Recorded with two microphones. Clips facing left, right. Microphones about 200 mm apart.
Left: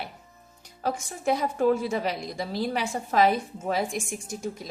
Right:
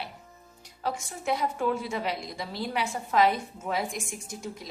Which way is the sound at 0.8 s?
45° left (ahead or behind).